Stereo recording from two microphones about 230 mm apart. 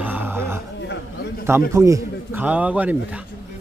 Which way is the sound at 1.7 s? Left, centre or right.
Centre.